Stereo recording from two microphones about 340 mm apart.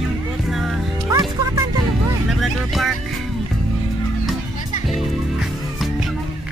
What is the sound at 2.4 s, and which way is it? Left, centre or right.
Music, centre.